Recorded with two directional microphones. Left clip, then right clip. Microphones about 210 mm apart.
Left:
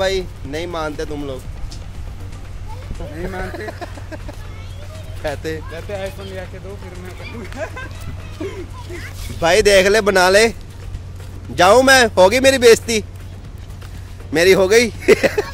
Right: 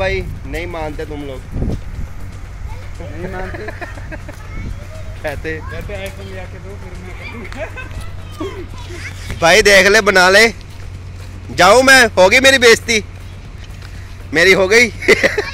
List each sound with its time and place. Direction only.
0.0 s speech: 25° left (ahead or behind)
3.5 s speech: 15° left (ahead or behind)
5.2 s speech: 15° left (ahead or behind)
7.6 s speech: 15° left (ahead or behind)
9.4 s speech: 5° left (ahead or behind)
14.3 s speech: 15° left (ahead or behind)